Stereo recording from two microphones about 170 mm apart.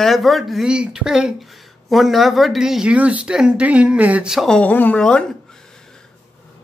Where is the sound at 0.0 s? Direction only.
Centre (ahead or behind).